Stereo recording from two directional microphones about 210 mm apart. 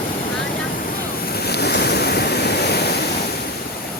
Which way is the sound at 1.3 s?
50° left (ahead or behind).